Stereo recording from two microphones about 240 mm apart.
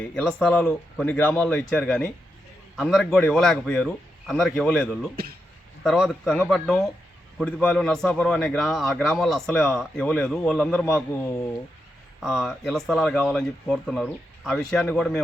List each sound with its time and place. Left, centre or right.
0.0 s a man's voice: centre
5.1 s speech: right
5.8 s a man's voice: centre
12.2 s a man's voice: centre